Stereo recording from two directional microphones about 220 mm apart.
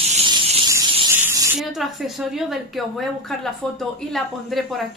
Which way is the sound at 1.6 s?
Centre (ahead or behind).